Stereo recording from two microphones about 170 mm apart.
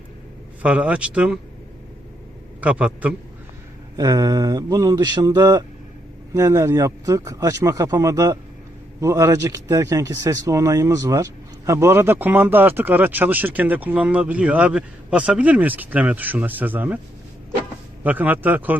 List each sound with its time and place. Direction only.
0.6 s a man's voice: 5° right (ahead or behind)
2.6 s a man's voice: 10° right (ahead or behind)
3.9 s a man's voice: 20° right (ahead or behind)
18.0 s a man's voice: 10° right (ahead or behind)